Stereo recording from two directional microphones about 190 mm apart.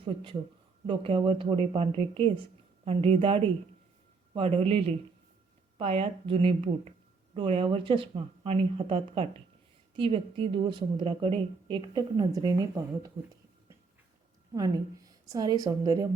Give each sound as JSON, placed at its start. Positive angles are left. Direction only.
{"t": 0.0, "sound": "a woman's voice", "side_deg": -25}
{"t": 4.4, "sound": "a woman's voice", "side_deg": -30}
{"t": 14.5, "sound": "a woman's voice", "side_deg": -20}